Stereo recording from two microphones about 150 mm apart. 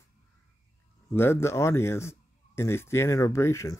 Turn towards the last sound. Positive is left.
turn(degrees=20)  # may be behind; listen again after turning